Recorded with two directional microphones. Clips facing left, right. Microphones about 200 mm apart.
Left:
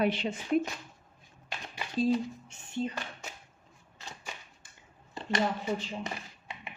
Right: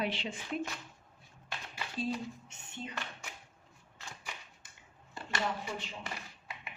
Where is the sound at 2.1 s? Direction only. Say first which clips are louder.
Left 8 dB; 30° left (ahead or behind).